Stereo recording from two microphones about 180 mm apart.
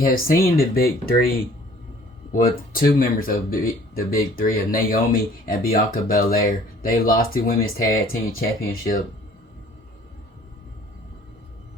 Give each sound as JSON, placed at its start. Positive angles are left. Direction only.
{"t": 0.0, "sound": "speech", "side_deg": 50}